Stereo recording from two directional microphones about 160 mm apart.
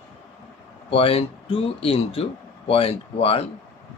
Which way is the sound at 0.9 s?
35° left (ahead or behind).